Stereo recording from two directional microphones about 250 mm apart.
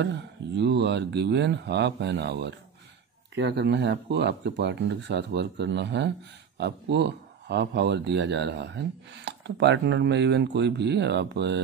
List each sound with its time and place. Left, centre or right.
0.0 s speech: right